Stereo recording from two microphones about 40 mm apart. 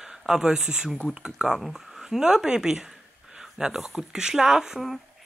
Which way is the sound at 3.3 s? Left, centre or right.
Centre.